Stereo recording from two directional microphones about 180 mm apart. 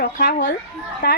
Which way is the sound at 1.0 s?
70° left (ahead or behind).